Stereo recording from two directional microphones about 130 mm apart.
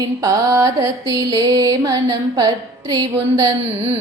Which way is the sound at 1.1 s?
30° right (ahead or behind).